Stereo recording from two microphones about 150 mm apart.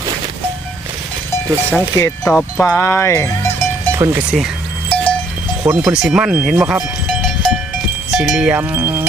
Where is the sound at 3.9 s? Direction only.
20° right (ahead or behind).